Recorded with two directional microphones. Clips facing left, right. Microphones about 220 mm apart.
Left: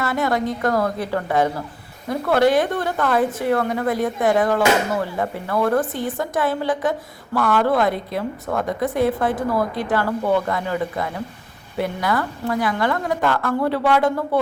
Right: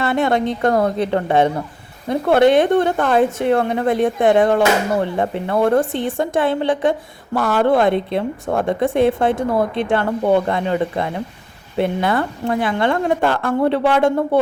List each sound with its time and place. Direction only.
0.0 s a woman's voice: 25° right (ahead or behind)